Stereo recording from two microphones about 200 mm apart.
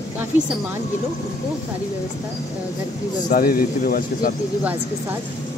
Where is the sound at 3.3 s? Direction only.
45° left (ahead or behind).